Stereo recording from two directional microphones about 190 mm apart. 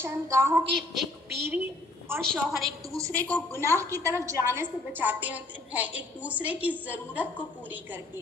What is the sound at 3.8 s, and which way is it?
A woman's voice, 15° right (ahead or behind).